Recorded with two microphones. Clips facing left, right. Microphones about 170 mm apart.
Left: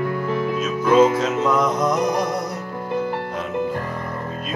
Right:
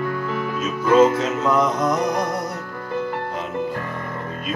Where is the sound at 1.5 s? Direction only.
Centre (ahead or behind).